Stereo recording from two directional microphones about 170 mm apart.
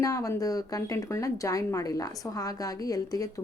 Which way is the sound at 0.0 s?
20° left (ahead or behind).